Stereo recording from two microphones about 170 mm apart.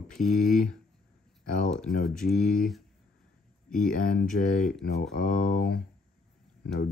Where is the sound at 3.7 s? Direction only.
55° left (ahead or behind).